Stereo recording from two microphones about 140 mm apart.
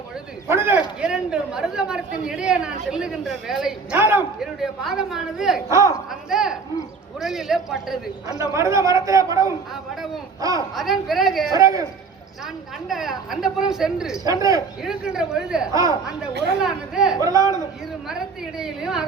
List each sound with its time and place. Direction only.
0.4 s a man's voice: 15° right (ahead or behind)
3.9 s a man's voice: 15° right (ahead or behind)
4.4 s a woman's voice: 5° right (ahead or behind)
5.6 s speech: 20° right (ahead or behind)
6.1 s a woman's voice: 5° right (ahead or behind)
8.3 s speech: 20° right (ahead or behind)
10.8 s a woman's voice: centre (ahead or behind)
11.5 s speech: 25° right (ahead or behind)
12.9 s a woman's voice: 5° right (ahead or behind)
14.3 s speech: 25° right (ahead or behind)
14.8 s a woman's voice: 5° right (ahead or behind)
17.2 s speech: 25° right (ahead or behind)
18.1 s a woman's voice: 5° right (ahead or behind)